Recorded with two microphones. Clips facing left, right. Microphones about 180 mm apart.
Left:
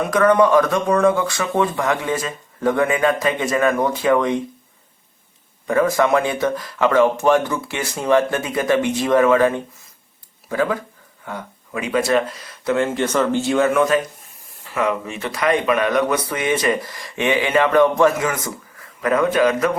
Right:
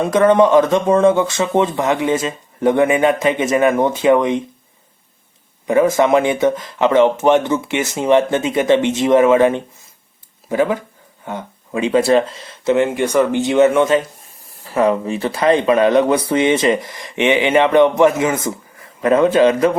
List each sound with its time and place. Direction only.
0.0 s speech: 25° right (ahead or behind)
5.6 s speech: 20° right (ahead or behind)
14.6 s speech: 35° right (ahead or behind)